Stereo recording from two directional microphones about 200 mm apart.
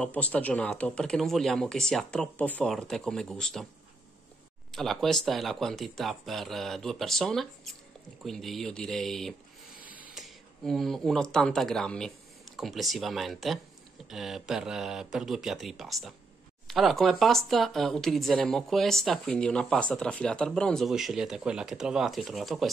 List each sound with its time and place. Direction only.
0.0 s speech: 5° left (ahead or behind)
4.7 s speech: centre (ahead or behind)